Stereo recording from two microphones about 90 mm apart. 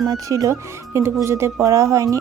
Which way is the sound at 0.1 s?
40° right (ahead or behind).